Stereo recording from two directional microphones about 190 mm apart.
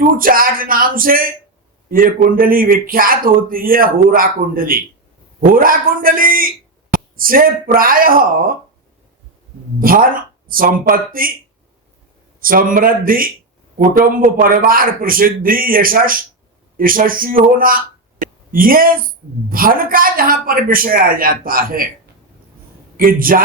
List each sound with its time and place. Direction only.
0.2 s a woman's voice: 50° right (ahead or behind)
9.8 s a woman's voice: 50° right (ahead or behind)
12.4 s a woman's voice: 45° right (ahead or behind)
23.0 s a woman's voice: 50° right (ahead or behind)